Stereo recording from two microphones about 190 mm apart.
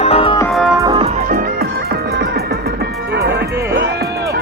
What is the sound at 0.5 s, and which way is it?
Music, centre (ahead or behind).